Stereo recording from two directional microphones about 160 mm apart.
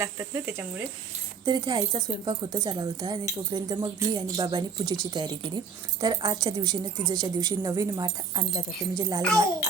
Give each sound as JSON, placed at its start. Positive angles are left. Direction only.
{"t": 0.0, "sound": "speech", "side_deg": -15}
{"t": 1.5, "sound": "speech", "side_deg": -25}